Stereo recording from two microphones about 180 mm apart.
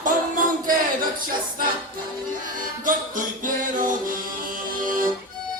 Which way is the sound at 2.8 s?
50° right (ahead or behind).